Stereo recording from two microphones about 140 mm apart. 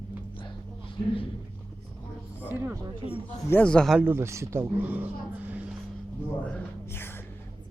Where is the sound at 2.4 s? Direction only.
15° right (ahead or behind).